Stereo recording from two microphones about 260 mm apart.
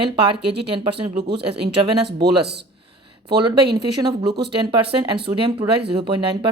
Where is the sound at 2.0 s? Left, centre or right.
Right.